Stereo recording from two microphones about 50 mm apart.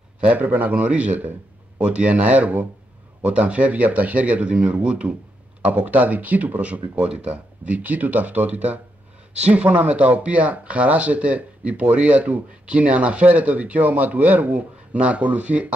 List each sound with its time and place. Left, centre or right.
0.2 s speech: right